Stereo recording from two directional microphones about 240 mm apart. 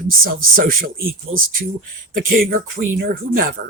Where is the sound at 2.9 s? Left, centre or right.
Right.